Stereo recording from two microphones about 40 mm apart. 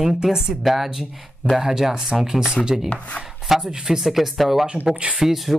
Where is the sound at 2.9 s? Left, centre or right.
Left.